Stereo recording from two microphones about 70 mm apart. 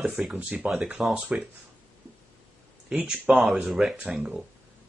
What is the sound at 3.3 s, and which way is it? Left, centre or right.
Speech, centre.